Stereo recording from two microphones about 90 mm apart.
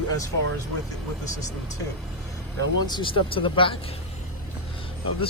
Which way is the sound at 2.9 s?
80° left.